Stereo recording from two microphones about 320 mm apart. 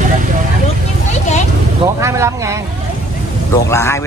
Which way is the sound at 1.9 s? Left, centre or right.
Centre.